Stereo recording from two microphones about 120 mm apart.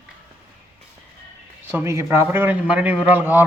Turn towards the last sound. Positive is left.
turn(degrees=-15)  # may be behind; listen again after turning